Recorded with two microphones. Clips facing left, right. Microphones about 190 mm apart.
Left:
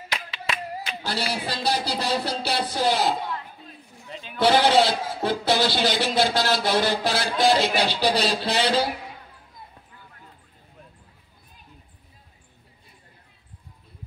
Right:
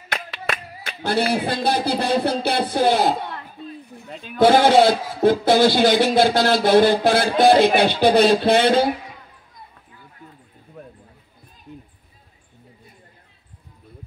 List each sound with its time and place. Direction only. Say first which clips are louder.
0.1 s speech: right 4 dB; 55° right (ahead or behind)